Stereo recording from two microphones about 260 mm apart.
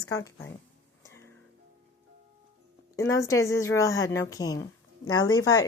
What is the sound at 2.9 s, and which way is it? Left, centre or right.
Speech, centre.